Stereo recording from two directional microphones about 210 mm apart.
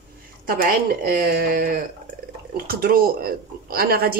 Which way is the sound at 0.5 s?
45° right (ahead or behind).